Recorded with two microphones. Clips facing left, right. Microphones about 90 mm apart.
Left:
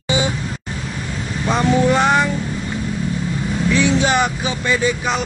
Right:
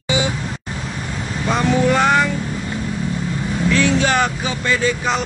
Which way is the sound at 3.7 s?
15° left (ahead or behind).